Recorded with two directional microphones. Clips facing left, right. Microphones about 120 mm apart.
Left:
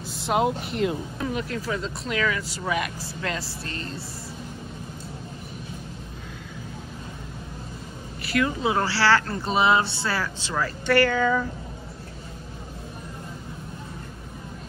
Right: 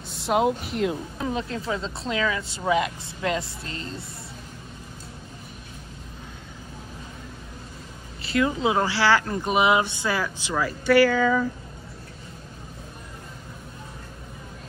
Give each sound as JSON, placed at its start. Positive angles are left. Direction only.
{"t": 0.0, "sound": "speech", "side_deg": 0}
{"t": 1.1, "sound": "speech", "side_deg": -25}
{"t": 8.2, "sound": "speech", "side_deg": -25}